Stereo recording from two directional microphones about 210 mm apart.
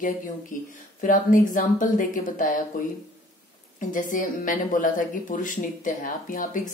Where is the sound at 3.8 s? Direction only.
40° left (ahead or behind).